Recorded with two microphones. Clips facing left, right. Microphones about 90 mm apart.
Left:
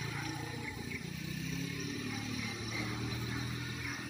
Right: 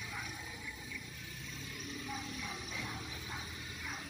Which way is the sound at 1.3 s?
90° left.